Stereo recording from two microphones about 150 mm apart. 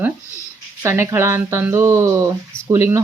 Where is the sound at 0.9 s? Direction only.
20° right (ahead or behind).